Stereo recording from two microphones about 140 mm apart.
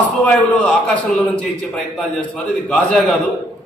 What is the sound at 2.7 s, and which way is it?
Speech, 10° left (ahead or behind).